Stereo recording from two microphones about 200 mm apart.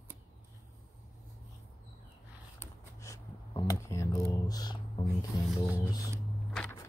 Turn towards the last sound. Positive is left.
turn(degrees=10)  # may be behind; listen again after turning